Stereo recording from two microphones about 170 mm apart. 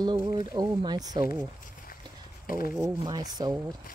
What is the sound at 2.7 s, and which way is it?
Speech, 15° right (ahead or behind).